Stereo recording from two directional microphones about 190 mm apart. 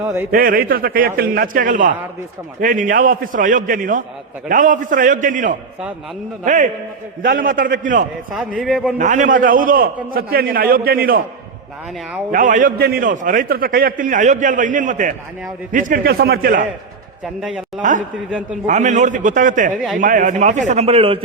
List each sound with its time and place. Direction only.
0.0 s a man's voice: 15° right (ahead or behind)
0.3 s a man's voice: 50° right (ahead or behind)
8.3 s speech: 5° right (ahead or behind)
9.0 s a man's voice: 40° right (ahead or behind)
12.3 s a man's voice: 45° right (ahead or behind)
17.4 s speech: 5° right (ahead or behind)
18.6 s a man's voice: 40° right (ahead or behind)